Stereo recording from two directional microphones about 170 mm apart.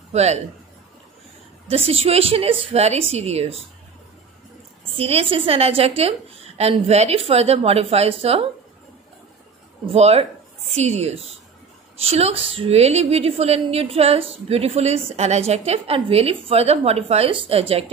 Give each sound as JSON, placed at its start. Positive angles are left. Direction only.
{"t": 0.1, "sound": "a man's voice", "side_deg": -40}
{"t": 1.7, "sound": "a woman's voice", "side_deg": -35}
{"t": 4.9, "sound": "a woman's voice", "side_deg": -35}
{"t": 9.8, "sound": "a woman's voice", "side_deg": -35}